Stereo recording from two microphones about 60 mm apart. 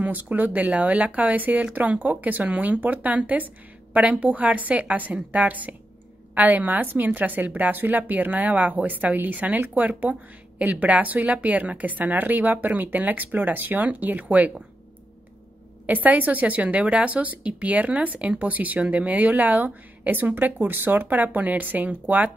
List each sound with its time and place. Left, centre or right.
0.0 s speech: right
15.9 s speech: right